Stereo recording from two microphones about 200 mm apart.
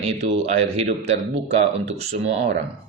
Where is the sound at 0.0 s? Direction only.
30° right (ahead or behind).